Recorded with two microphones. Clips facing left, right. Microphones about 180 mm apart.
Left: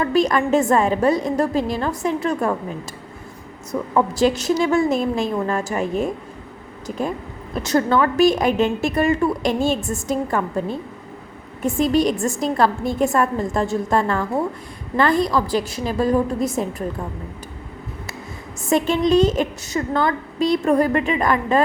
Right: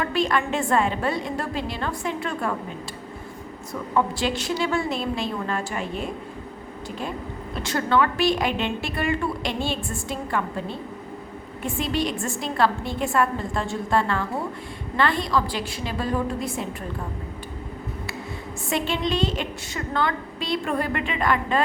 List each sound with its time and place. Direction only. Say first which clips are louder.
0.0 s a woman's voice: left 6 dB; 40° left (ahead or behind)
3.7 s a woman's voice: left 4 dB; 40° left (ahead or behind)
7.5 s a woman's voice: left 5 dB; 40° left (ahead or behind)
18.7 s a woman's voice: left 8 dB; 45° left (ahead or behind)